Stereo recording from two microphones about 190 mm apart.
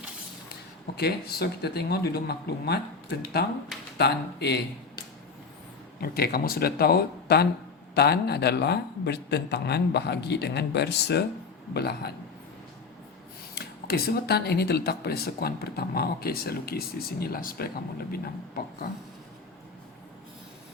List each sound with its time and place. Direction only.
0.9 s a man's voice: 55° left (ahead or behind)
6.0 s a man's voice: 55° left (ahead or behind)
13.6 s speech: 55° left (ahead or behind)